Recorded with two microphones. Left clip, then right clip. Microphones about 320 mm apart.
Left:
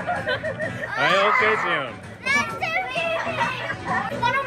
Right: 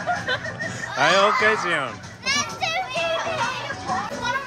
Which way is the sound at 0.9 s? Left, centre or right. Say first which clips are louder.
Right 1 dB; centre.